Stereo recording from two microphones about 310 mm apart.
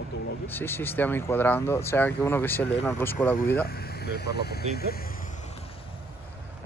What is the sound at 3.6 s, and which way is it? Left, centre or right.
Speech, left.